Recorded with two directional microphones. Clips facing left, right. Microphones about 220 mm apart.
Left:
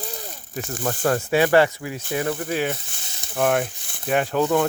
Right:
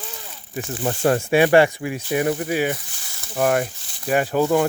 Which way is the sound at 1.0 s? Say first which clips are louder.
Right 3 dB; 25° right (ahead or behind).